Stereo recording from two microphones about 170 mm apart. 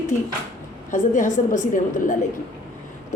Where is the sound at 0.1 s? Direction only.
50° left (ahead or behind).